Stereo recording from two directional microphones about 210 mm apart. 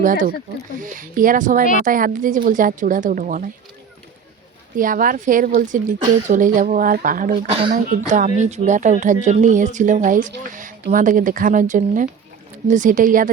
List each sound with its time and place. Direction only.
0.8 s speech: 40° right (ahead or behind)
4.8 s speech: 40° right (ahead or behind)